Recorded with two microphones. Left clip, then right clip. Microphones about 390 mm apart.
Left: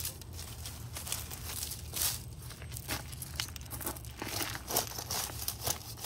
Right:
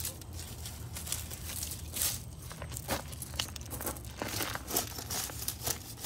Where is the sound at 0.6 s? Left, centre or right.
Centre.